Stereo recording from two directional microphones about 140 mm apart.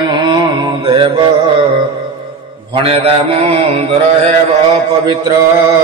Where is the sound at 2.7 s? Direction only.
45° right (ahead or behind).